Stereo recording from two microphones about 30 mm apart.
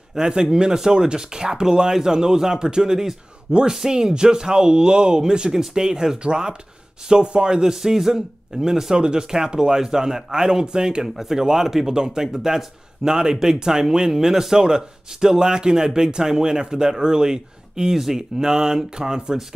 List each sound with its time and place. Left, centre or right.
0.1 s speech: right
7.7 s speech: centre
8.9 s speech: right
11.0 s speech: centre